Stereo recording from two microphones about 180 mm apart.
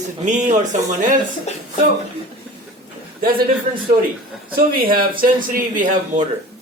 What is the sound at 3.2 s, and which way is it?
Speech, 55° right (ahead or behind).